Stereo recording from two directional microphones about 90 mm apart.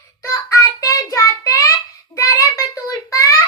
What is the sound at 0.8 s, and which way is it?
Child singing, 35° left (ahead or behind).